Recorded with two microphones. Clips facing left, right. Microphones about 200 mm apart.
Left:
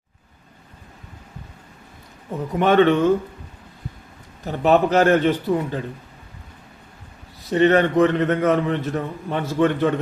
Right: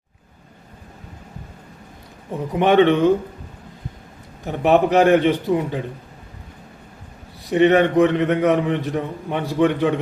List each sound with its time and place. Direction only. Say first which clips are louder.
2.5 s a man's voice: right 1 dB; 15° right (ahead or behind)
4.4 s a man's voice: right 1 dB; 15° right (ahead or behind)
7.5 s a man's voice: right 2 dB; 15° right (ahead or behind)